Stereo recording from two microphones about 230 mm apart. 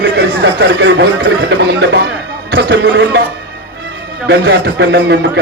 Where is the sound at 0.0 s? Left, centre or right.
Right.